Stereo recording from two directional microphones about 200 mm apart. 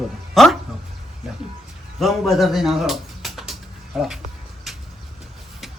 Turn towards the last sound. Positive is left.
turn(degrees=0)  # may be behind; listen again after turning